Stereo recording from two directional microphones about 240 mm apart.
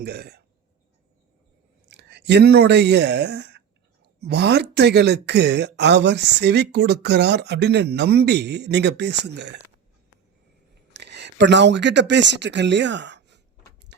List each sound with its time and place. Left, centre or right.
0.0 s speech: right
1.9 s speech: right
10.9 s speech: right